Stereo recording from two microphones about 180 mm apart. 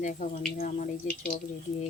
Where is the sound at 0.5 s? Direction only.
50° left (ahead or behind).